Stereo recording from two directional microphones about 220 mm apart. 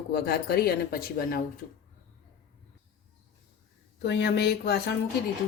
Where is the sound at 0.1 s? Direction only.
45° left (ahead or behind).